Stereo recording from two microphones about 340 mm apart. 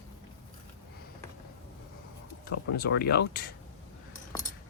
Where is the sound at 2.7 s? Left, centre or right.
Left.